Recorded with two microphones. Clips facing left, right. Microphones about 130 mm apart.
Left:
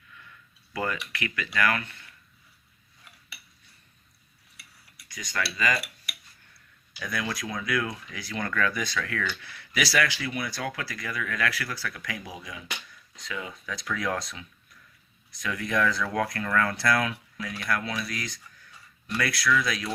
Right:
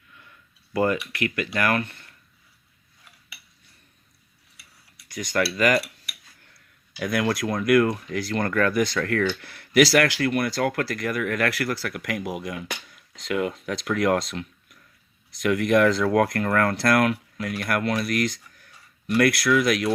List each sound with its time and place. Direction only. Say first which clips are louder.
0.7 s speech: right 8 dB; 40° right (ahead or behind)
5.1 s speech: right 8 dB; 45° right (ahead or behind)
5.5 s speech: right 7 dB; 60° right (ahead or behind)
6.9 s speech: right 8 dB; 70° right (ahead or behind); by 9.8 s 50° right (ahead or behind)
9.9 s speech: right 7 dB; 65° right (ahead or behind)